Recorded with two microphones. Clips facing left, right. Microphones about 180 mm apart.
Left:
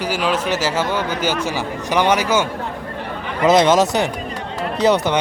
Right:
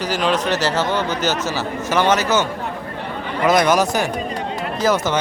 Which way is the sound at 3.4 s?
25° left (ahead or behind).